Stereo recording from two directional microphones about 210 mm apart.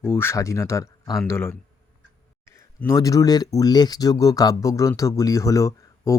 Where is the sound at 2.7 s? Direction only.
15° left (ahead or behind).